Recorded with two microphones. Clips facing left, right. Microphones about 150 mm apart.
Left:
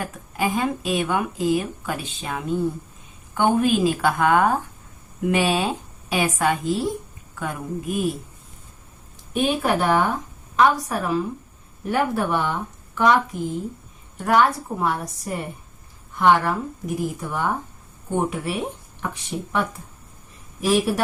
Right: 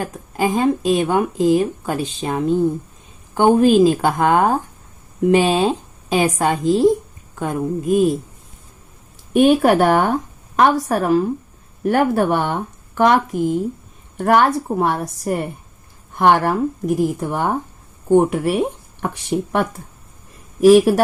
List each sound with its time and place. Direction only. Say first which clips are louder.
0.0 s speech: right 5 dB; 35° right (ahead or behind)
9.3 s speech: right 9 dB; 55° right (ahead or behind)